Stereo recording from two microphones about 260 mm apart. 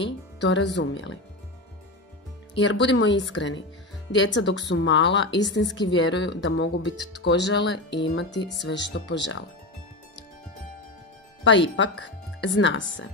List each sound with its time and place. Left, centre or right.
0.0 s speech: left
2.6 s speech: left
12.0 s speech: left